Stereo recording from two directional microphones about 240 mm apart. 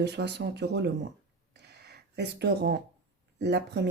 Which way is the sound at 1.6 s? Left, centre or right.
Right.